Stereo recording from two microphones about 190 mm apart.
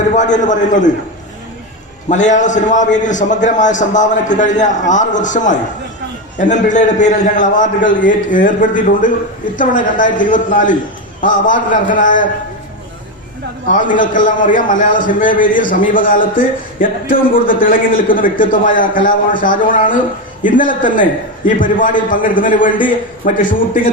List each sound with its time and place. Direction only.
0.1 s a man's voice: 40° left (ahead or behind)
2.0 s a man's voice: 40° left (ahead or behind)
13.7 s a man's voice: 45° left (ahead or behind)